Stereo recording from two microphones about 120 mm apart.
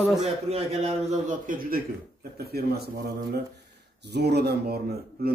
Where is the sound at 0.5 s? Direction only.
65° right (ahead or behind).